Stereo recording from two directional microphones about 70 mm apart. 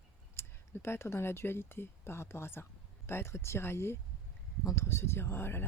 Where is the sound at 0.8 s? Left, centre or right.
Left.